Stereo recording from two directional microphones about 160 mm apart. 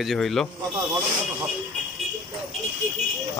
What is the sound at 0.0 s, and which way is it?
Speech, centre (ahead or behind).